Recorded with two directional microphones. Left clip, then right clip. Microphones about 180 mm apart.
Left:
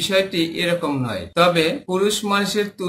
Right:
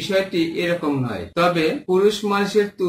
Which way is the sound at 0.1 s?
20° left (ahead or behind).